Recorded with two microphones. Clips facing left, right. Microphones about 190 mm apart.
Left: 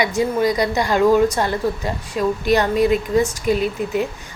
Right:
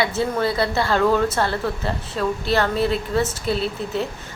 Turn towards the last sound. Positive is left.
turn(degrees=15)  # may be behind; listen again after turning